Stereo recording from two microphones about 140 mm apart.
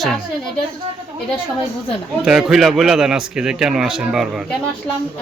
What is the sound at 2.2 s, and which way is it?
A man's voice, 5° right (ahead or behind).